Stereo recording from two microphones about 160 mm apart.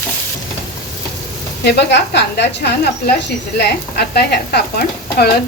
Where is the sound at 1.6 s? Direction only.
90° left.